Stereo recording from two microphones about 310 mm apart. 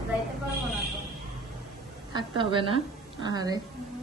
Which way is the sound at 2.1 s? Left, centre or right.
Centre.